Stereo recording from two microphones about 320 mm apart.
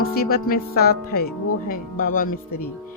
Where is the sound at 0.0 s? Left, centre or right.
Left.